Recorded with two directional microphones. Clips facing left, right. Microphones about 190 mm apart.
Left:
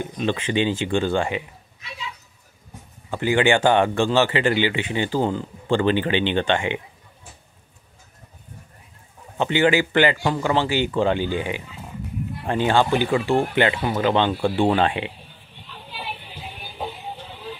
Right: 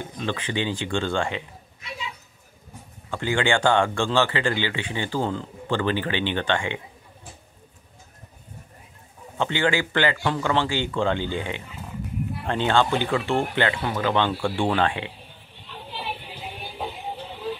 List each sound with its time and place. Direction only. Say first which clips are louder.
0.0 s speech: left 5 dB; 15° left (ahead or behind)
3.1 s speech: left 4 dB; 15° left (ahead or behind)
9.4 s speech: left 5 dB; 15° left (ahead or behind)